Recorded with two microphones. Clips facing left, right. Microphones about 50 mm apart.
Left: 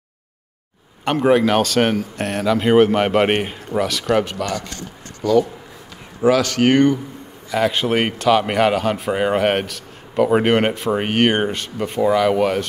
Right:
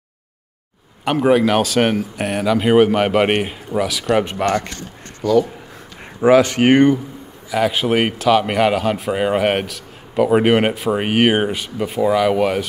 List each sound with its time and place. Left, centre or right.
1.0 s a man's voice: centre
4.2 s speech: right
4.5 s speech: right
5.2 s a man's voice: centre
6.2 s speech: right
7.5 s a man's voice: centre